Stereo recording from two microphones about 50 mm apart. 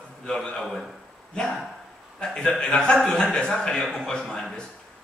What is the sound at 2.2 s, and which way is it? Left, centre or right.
A man's voice, centre.